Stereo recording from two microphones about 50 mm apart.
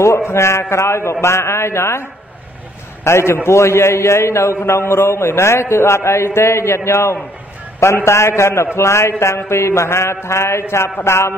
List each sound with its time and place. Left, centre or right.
0.0 s a man's voice: left
4.7 s a man's voice: left